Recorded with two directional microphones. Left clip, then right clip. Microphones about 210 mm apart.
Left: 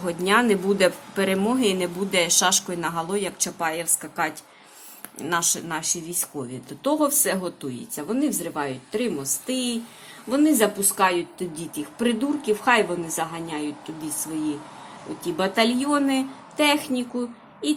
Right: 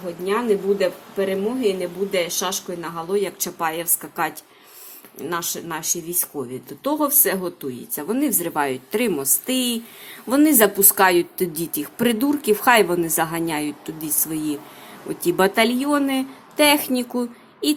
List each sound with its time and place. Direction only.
0.3 s a woman's voice: 10° left (ahead or behind); by 17.7 s 20° right (ahead or behind)